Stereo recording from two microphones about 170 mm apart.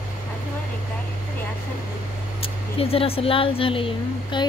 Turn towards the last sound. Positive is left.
turn(degrees=30)  # may be behind; listen again after turning